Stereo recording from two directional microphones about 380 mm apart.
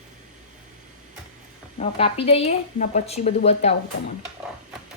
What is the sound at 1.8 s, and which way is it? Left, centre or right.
Speech, centre.